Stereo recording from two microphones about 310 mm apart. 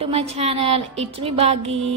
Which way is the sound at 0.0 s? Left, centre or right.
Centre.